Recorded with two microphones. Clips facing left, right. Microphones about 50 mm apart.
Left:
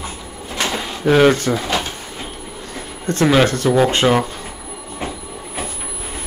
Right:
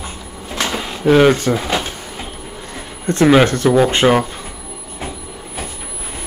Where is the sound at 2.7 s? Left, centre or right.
Right.